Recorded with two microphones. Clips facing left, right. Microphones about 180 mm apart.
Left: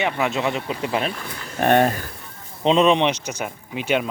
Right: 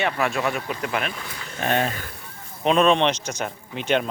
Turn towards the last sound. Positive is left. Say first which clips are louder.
# left 1 dB
turn(degrees=5)  # may be behind; listen again after turning